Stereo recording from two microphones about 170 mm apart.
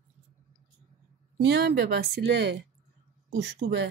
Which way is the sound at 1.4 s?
80° right.